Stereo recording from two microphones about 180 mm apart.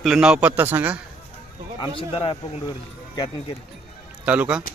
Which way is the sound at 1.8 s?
30° left (ahead or behind).